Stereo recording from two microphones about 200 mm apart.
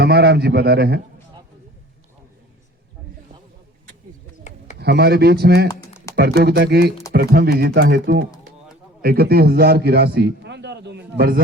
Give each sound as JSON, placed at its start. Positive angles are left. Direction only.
{"t": 0.0, "sound": "speech", "side_deg": -55}
{"t": 4.8, "sound": "speech", "side_deg": -55}
{"t": 9.0, "sound": "a man's voice", "side_deg": -50}